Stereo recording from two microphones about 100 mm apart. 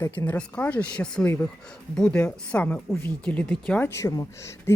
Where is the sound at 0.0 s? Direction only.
25° left (ahead or behind).